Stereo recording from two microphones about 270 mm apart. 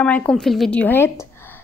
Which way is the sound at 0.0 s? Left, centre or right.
Centre.